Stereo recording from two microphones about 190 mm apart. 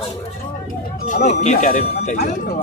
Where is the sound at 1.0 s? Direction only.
40° left (ahead or behind).